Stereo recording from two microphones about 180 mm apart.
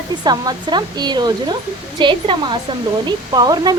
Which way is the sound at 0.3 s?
25° right (ahead or behind).